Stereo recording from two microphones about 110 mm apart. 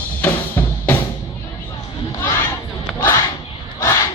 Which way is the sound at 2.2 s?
25° left (ahead or behind).